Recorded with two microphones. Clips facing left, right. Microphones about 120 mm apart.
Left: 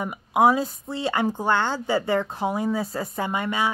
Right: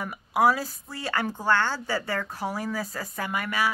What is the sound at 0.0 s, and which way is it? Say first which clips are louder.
A woman's voice: left 3 dB; 20° left (ahead or behind).